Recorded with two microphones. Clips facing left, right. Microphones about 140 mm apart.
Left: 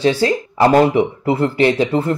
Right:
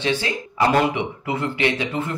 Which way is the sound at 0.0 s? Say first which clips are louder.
Left 8 dB; 40° left (ahead or behind).